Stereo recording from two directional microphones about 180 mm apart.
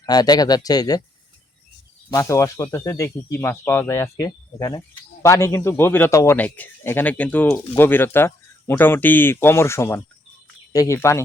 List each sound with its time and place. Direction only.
0.0 s speech: 20° left (ahead or behind)
2.1 s a man's voice: 15° left (ahead or behind)